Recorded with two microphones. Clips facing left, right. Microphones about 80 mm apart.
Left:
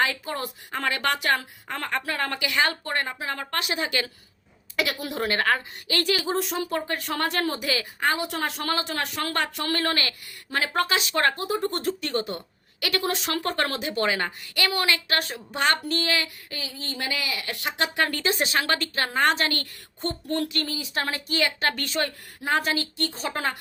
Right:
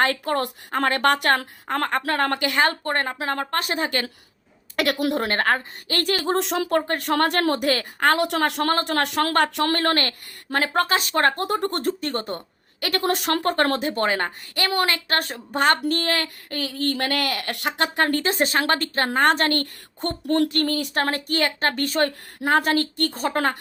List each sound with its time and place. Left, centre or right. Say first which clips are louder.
0.0 s speech: right 5 dB; right
0.7 s a woman's voice: right 6 dB; right
4.8 s speech: right 6 dB; right
5.1 s a woman's voice: right 2 dB; right
6.3 s a woman's voice: right 5 dB; right
11.3 s speech: right 3 dB; right
11.8 s a woman's voice: right 2 dB; right
17.7 s a woman's voice: right 4 dB; right
20.5 s a woman's voice: right 7 dB; right